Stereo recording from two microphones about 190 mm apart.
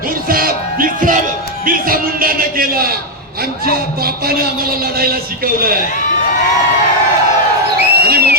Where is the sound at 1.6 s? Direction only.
45° right (ahead or behind).